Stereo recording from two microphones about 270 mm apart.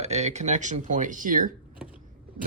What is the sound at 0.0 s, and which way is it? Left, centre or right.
Speech, right.